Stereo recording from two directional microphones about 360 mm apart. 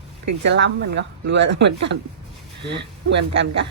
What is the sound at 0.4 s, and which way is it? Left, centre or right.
Speech, right.